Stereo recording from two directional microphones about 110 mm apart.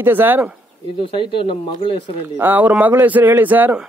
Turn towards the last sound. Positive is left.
turn(degrees=-15)  # may be behind; listen again after turning